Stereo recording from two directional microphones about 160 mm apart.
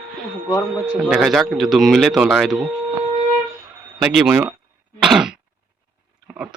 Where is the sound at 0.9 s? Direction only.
Centre (ahead or behind).